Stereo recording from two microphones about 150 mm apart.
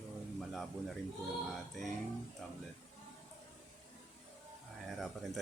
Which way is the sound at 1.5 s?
Centre (ahead or behind).